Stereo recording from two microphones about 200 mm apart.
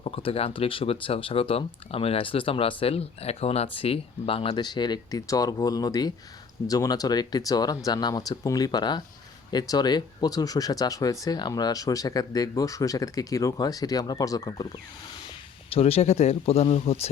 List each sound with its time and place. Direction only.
0.0 s speech: 25° left (ahead or behind)
15.7 s speech: 30° left (ahead or behind)